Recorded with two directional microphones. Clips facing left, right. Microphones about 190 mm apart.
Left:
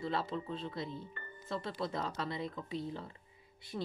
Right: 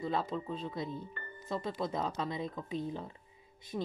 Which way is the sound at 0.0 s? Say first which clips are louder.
Right 2 dB; 15° right (ahead or behind).